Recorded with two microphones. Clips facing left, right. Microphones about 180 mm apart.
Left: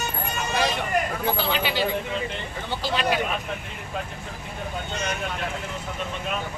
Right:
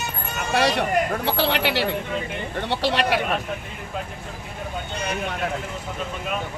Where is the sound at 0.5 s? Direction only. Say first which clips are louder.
Right 5 dB; 70° right (ahead or behind).